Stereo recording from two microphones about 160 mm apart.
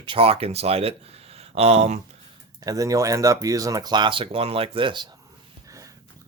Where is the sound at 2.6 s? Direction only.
20° right (ahead or behind).